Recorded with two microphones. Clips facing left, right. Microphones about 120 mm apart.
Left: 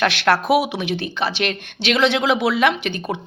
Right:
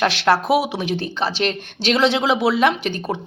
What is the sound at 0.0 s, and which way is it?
Speech, 30° right (ahead or behind).